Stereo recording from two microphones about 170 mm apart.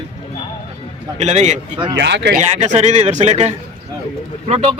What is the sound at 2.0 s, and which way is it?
Speech, 90° right.